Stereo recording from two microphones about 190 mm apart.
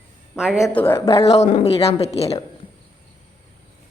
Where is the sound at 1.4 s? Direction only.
35° left (ahead or behind).